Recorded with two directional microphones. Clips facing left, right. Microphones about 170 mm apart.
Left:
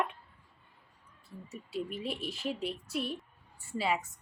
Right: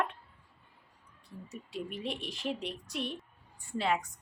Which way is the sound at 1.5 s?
Centre (ahead or behind).